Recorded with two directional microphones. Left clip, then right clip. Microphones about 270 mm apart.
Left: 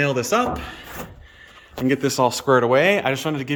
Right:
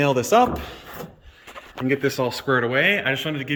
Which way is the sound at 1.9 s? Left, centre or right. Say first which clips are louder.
Left 3 dB; centre.